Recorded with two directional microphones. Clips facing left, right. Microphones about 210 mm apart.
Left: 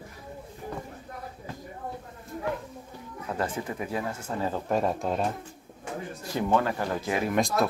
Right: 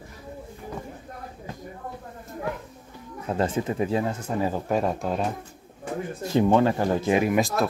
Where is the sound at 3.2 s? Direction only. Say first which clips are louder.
Right 6 dB; 25° right (ahead or behind); by 5.3 s centre (ahead or behind).